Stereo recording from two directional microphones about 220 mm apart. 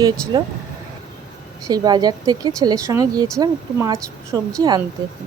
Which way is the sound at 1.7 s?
20° right (ahead or behind).